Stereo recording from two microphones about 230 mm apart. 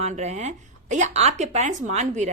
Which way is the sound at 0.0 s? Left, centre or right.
Right.